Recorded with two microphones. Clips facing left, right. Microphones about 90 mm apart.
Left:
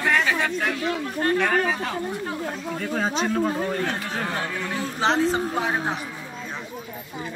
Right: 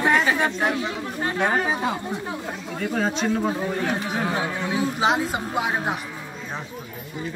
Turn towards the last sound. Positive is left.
turn(degrees=-15)  # may be behind; listen again after turning